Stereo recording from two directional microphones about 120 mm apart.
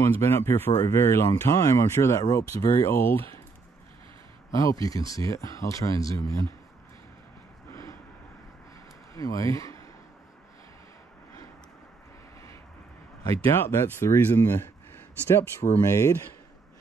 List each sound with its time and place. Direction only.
0.0 s speech: 20° left (ahead or behind)
4.5 s speech: 30° left (ahead or behind)
9.2 s speech: 30° left (ahead or behind)
13.2 s speech: 30° left (ahead or behind)
15.8 s speech: 25° left (ahead or behind)